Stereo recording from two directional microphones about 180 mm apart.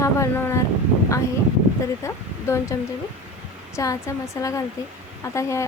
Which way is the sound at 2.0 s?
15° left (ahead or behind).